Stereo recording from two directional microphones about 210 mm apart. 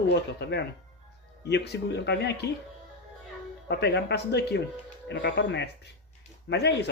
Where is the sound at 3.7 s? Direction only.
55° left (ahead or behind).